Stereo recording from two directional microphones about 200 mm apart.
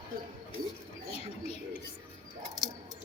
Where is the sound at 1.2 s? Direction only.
30° left (ahead or behind).